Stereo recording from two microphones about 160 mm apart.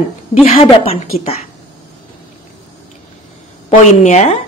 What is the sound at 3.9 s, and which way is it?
Speech, 45° left (ahead or behind).